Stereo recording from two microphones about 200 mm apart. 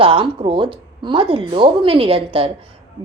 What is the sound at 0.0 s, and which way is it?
Speech, 25° right (ahead or behind).